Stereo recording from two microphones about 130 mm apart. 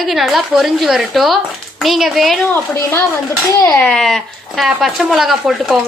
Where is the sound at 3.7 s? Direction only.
10° left (ahead or behind).